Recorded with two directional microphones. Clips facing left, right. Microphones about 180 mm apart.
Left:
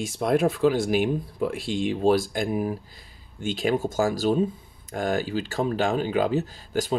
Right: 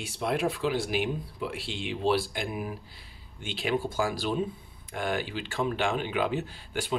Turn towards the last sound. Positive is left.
turn(degrees=40)  # may be behind; listen again after turning